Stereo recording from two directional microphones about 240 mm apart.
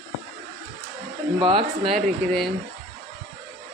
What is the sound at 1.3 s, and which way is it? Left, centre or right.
Speech, right.